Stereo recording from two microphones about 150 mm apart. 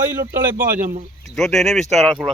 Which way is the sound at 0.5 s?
65° right (ahead or behind).